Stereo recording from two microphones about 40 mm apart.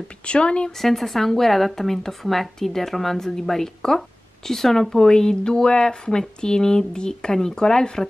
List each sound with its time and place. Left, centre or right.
0.2 s speech: left
0.7 s speech: centre